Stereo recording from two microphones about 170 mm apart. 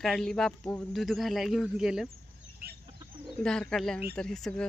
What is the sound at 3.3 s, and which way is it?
Speech, 5° left (ahead or behind).